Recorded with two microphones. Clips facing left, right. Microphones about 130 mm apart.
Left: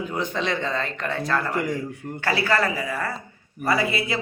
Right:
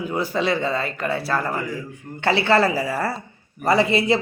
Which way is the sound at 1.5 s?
80° left.